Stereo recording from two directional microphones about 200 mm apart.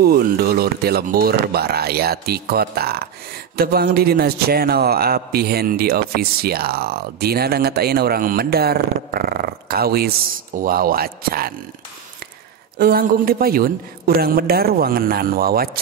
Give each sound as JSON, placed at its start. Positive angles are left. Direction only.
{"t": 0.0, "sound": "a man's voice", "side_deg": -50}
{"t": 12.7, "sound": "a man's voice", "side_deg": -50}